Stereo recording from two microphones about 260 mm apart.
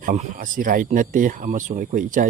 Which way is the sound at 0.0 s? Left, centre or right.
Right.